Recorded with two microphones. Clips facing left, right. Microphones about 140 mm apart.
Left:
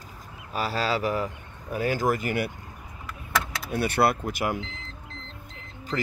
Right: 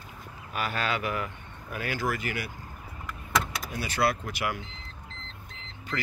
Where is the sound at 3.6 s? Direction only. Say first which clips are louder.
Left 5 dB; 60° left (ahead or behind).